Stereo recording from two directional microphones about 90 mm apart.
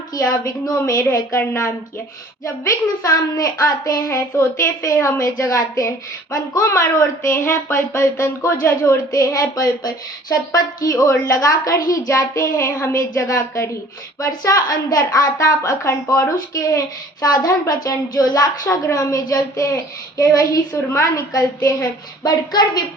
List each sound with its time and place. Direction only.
0.1 s a woman's voice: 45° left (ahead or behind)
22.2 s a woman's voice: 45° left (ahead or behind)